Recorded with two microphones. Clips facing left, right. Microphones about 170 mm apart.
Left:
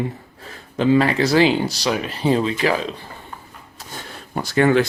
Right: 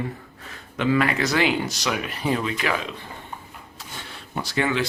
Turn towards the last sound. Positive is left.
turn(degrees=50)  # may be behind; listen again after turning